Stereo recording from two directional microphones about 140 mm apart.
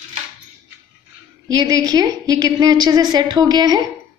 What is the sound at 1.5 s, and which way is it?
A woman's voice, 30° right (ahead or behind).